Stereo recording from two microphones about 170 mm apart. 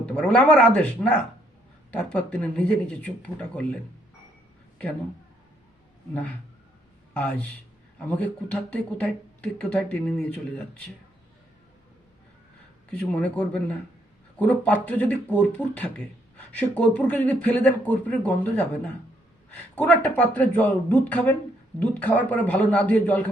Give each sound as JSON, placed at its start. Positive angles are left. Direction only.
{"t": 0.0, "sound": "speech", "side_deg": 5}
{"t": 7.1, "sound": "a man's voice", "side_deg": 5}
{"t": 13.1, "sound": "speech", "side_deg": 5}